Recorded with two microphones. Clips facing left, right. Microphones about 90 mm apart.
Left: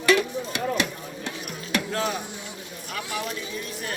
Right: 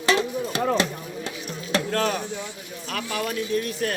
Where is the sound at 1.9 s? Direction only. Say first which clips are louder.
Right 5 dB; 60° right (ahead or behind).